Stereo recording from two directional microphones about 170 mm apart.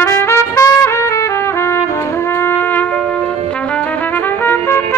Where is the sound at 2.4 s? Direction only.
10° left (ahead or behind).